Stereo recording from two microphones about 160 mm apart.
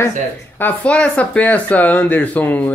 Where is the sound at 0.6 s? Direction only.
10° left (ahead or behind).